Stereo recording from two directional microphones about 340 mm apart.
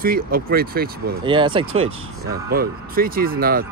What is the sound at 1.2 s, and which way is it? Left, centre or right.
Speech, centre.